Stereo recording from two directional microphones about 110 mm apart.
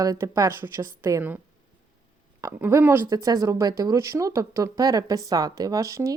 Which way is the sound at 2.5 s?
20° right (ahead or behind).